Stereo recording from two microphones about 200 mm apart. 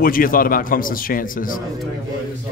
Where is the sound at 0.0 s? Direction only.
45° left (ahead or behind).